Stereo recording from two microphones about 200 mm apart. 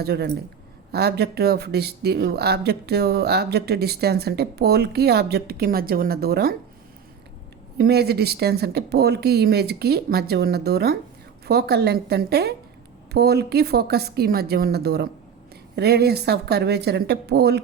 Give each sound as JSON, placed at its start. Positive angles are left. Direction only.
{"t": 0.0, "sound": "speech", "side_deg": -50}
{"t": 7.8, "sound": "speech", "side_deg": -55}